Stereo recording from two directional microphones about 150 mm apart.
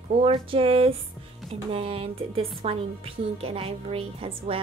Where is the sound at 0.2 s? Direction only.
40° right (ahead or behind).